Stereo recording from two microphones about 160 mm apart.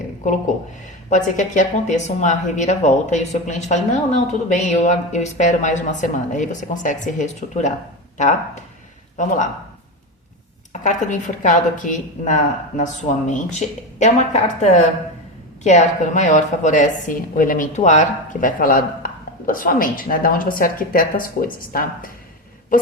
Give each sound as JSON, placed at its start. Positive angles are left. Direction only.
{"t": 1.1, "sound": "speech", "side_deg": 50}
{"t": 10.7, "sound": "a woman's voice", "side_deg": 50}